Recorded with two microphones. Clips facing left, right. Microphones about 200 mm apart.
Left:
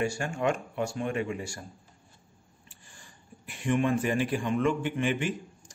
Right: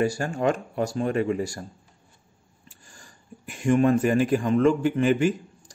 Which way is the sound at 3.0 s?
45° right (ahead or behind).